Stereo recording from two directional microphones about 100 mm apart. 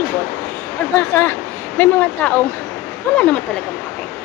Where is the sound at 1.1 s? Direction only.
25° left (ahead or behind).